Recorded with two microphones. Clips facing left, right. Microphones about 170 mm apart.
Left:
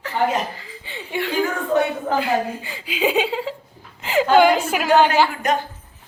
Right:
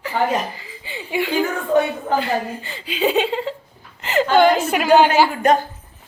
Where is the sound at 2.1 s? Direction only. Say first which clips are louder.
Even; 5° left (ahead or behind).